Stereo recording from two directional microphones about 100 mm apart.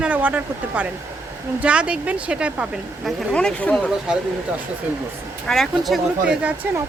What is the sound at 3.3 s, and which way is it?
Speech, 10° left (ahead or behind).